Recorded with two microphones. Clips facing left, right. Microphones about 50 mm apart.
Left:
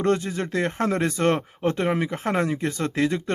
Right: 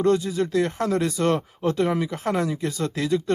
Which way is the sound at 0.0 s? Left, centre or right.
Left.